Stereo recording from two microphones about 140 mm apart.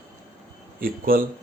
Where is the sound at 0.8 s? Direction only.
90° right.